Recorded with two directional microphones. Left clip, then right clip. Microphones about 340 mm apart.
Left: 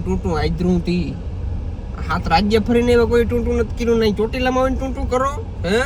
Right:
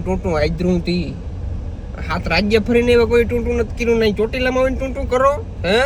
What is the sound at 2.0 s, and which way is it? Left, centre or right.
Speech, centre.